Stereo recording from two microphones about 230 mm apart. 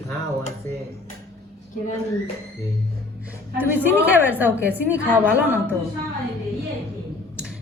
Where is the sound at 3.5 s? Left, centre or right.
Centre.